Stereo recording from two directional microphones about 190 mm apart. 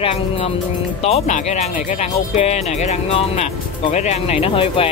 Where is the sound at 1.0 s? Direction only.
35° left (ahead or behind).